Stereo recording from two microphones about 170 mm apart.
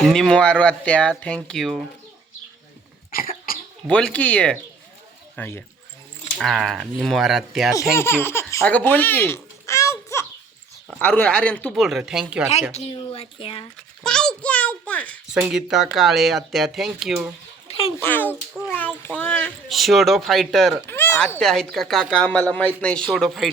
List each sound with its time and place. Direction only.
0.0 s speech: 5° left (ahead or behind)
3.1 s cough: 55° left (ahead or behind)
3.8 s a child's voice: 5° left (ahead or behind)
7.9 s baby laughter: 15° left (ahead or behind)
10.8 s a child's voice: 10° left (ahead or behind)
12.7 s speech: 35° left (ahead or behind)
13.7 s a child's voice: 5° left (ahead or behind)
15.4 s speech: 5° right (ahead or behind)
18.0 s a child's voice: 10° left (ahead or behind)
20.8 s speech: 10° left (ahead or behind)